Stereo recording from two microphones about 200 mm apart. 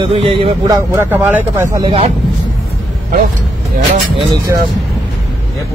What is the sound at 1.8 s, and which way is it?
Speech, 30° right (ahead or behind).